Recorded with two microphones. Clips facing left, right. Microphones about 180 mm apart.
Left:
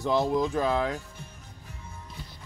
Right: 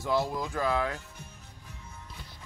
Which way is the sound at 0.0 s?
20° left (ahead or behind).